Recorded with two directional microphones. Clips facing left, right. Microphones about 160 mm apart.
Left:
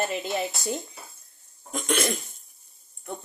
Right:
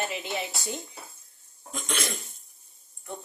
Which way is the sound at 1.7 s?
55° left (ahead or behind).